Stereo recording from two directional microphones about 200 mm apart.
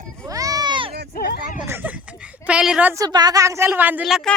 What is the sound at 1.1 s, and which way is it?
Speech, 55° left (ahead or behind).